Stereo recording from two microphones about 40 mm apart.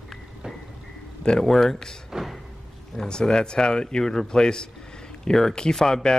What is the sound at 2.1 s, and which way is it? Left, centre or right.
Slam, centre.